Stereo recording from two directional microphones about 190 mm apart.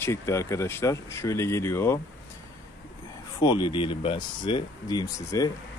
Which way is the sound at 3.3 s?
25° left (ahead or behind).